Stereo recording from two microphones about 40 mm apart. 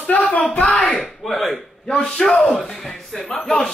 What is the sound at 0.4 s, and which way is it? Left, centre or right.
Speech, left.